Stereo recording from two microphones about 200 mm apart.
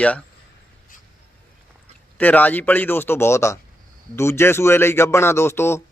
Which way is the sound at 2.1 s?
10° left (ahead or behind).